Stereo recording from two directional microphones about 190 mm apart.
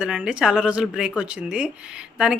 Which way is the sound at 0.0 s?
5° right (ahead or behind).